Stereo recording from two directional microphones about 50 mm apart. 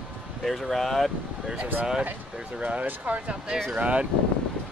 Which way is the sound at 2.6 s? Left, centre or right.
Right.